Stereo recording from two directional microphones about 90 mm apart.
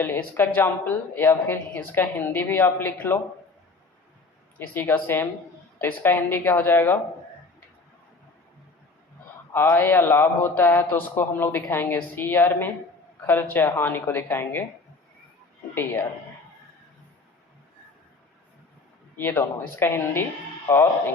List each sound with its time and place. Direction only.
0.0 s speech: 25° left (ahead or behind)
4.5 s speech: 20° left (ahead or behind)
9.5 s speech: 25° left (ahead or behind)
15.7 s speech: 25° left (ahead or behind)
19.1 s speech: 25° left (ahead or behind)